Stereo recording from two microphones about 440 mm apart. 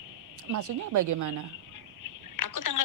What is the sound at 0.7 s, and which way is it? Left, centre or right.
Speech, right.